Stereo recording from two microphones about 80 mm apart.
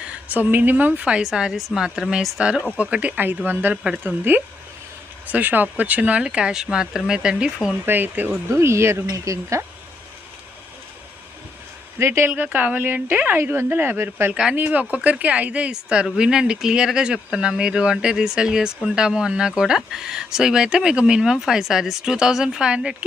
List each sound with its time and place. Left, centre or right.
0.3 s speech: right
7.9 s speech: right
8.4 s speech: right
11.9 s speech: right
12.3 s speech: right